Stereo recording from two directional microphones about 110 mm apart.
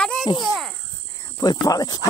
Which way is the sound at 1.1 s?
35° left (ahead or behind).